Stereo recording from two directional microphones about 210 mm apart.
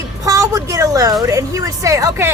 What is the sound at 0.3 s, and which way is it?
A woman's voice, 15° right (ahead or behind).